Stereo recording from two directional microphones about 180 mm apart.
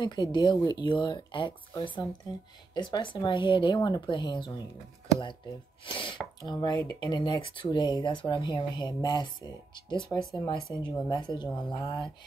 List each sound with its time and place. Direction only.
0.0 s speech: 25° left (ahead or behind)
2.7 s speech: 25° left (ahead or behind)
5.9 s speech: 25° left (ahead or behind)